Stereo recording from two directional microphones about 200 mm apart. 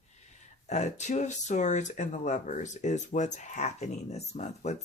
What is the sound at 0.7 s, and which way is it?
Speech, 35° left (ahead or behind).